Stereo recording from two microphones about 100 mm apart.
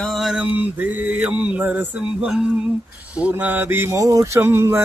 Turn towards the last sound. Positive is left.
turn(degrees=-25)  # may be behind; listen again after turning